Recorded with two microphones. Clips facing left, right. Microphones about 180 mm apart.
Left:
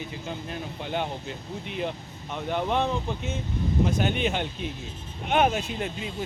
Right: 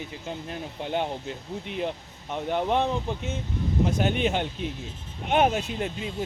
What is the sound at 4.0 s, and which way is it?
Speech, 40° right (ahead or behind).